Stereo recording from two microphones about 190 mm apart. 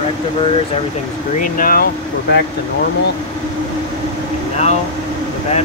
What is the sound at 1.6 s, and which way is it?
Speech, 50° left (ahead or behind).